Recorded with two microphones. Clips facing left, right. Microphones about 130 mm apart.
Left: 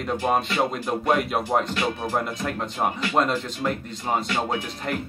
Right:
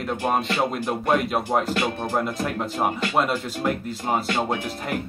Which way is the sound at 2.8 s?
5° right (ahead or behind).